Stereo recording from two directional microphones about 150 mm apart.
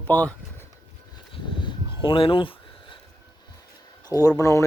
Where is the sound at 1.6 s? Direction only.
35° left (ahead or behind).